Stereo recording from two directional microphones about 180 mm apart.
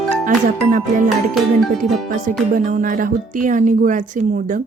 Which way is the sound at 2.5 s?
45° right (ahead or behind).